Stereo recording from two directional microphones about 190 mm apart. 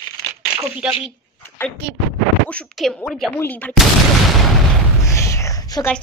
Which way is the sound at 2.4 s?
5° left (ahead or behind).